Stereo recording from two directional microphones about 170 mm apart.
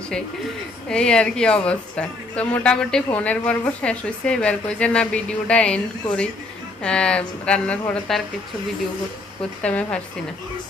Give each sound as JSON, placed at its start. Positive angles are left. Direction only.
{"t": 0.9, "sound": "a woman's voice", "side_deg": 5}
{"t": 9.6, "sound": "speech", "side_deg": 5}